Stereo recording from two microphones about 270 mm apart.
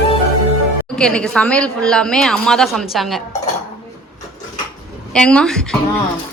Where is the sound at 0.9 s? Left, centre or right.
Centre.